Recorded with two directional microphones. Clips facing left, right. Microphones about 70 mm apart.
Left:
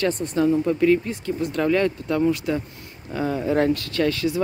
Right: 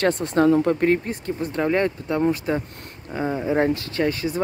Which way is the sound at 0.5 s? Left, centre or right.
Right.